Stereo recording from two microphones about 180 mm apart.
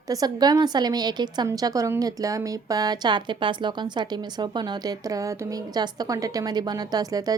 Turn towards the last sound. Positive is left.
turn(degrees=-20)  # may be behind; listen again after turning